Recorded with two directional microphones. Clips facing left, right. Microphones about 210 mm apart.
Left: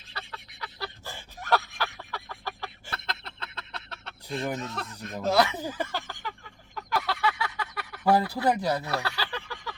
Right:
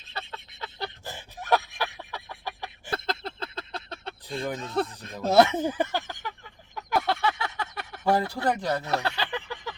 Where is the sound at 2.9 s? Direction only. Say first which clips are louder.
Right 11 dB; 30° right (ahead or behind).